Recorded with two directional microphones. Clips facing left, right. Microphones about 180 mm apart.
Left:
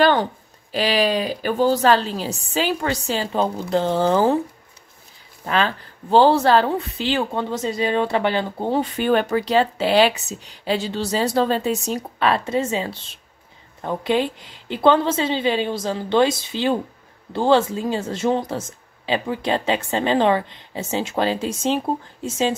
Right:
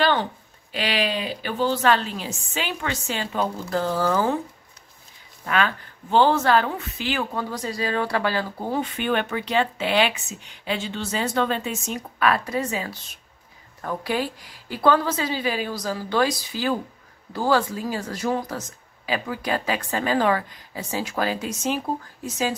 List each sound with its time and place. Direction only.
0.0 s a woman's voice: 45° left (ahead or behind)
5.4 s a woman's voice: 30° left (ahead or behind)